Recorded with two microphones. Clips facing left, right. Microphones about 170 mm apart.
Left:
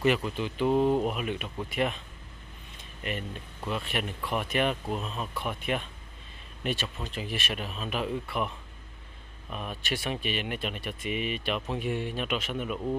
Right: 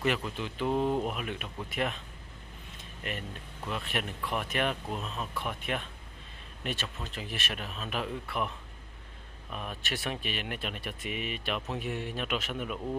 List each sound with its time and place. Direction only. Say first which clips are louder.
0.0 s speech: left 5 dB; 5° left (ahead or behind)
3.6 s speech: left 3 dB; centre (ahead or behind)